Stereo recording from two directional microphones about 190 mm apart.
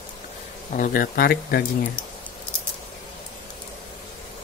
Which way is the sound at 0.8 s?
50° left (ahead or behind).